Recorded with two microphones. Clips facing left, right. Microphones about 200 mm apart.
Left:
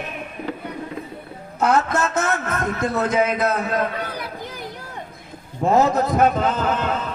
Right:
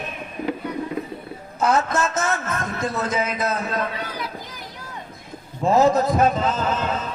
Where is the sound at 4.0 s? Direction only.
55° left (ahead or behind).